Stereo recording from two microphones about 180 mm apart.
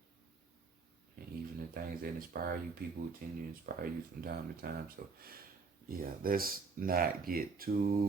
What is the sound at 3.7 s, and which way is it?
Speech, 55° right (ahead or behind).